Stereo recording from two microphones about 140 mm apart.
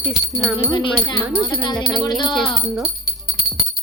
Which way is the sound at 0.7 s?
35° left (ahead or behind).